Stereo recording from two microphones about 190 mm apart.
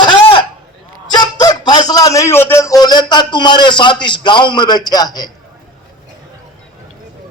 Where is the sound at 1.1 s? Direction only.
20° left (ahead or behind).